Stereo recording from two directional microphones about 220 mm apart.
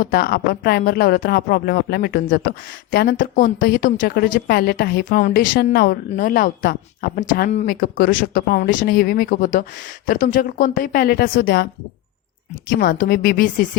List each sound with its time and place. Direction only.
0.0 s speech: 45° left (ahead or behind)